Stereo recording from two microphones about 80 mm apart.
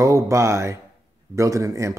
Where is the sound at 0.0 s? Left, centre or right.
Right.